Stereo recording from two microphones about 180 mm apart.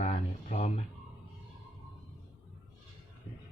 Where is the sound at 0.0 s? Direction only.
35° left (ahead or behind).